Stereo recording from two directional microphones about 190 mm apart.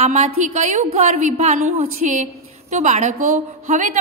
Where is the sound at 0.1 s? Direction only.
35° right (ahead or behind).